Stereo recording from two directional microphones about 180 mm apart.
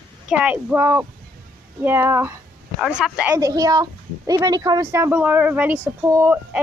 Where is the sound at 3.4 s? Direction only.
20° right (ahead or behind).